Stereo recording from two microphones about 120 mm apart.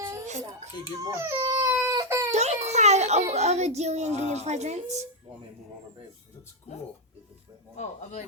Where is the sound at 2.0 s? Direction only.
25° right (ahead or behind).